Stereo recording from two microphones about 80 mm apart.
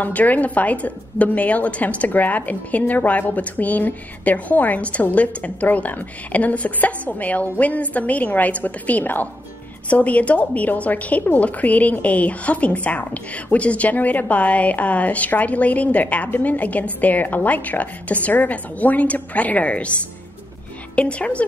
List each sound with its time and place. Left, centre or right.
0.0 s a woman's voice: left